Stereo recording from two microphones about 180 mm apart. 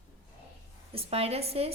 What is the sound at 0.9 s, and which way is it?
Speech, 35° right (ahead or behind).